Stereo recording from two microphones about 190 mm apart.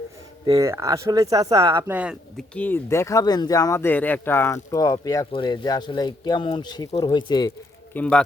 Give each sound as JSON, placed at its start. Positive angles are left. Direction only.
{"t": 0.4, "sound": "speech", "side_deg": -15}
{"t": 2.6, "sound": "speech", "side_deg": 10}
{"t": 7.9, "sound": "a man's voice", "side_deg": 5}